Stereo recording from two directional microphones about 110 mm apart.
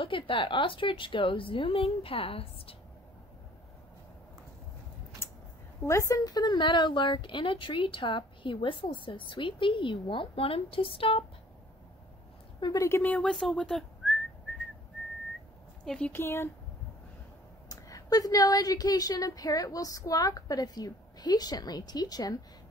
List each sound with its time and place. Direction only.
0.0 s speech: 50° left (ahead or behind)
5.9 s speech: 30° left (ahead or behind); by 11.2 s 55° left (ahead or behind)
12.5 s speech: 40° left (ahead or behind)
12.8 s speech: 25° left (ahead or behind)
13.1 s speech: 5° left (ahead or behind)
15.8 s speech: 5° left (ahead or behind)
16.1 s speech: 20° left (ahead or behind)
17.6 s a woman's voice: 30° left (ahead or behind)